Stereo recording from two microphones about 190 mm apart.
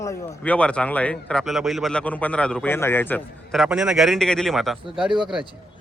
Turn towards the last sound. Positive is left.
turn(degrees=0)  # may be behind; listen again after turning